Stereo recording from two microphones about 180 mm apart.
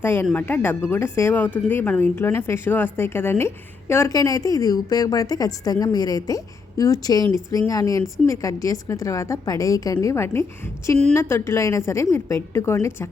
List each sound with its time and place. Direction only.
0.0 s a woman's voice: 10° left (ahead or behind)